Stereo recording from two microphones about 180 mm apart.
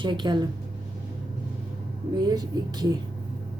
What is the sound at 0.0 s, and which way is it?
Speech, 25° right (ahead or behind).